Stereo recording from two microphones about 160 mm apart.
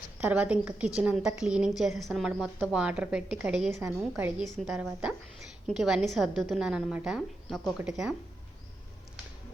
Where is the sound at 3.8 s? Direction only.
15° right (ahead or behind).